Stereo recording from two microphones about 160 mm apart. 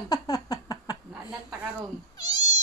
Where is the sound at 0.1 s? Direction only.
25° left (ahead or behind).